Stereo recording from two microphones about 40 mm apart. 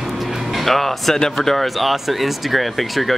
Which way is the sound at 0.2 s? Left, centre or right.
Centre.